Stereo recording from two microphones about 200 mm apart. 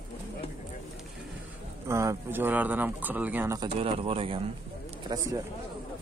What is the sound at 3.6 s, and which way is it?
Speech, 30° right (ahead or behind).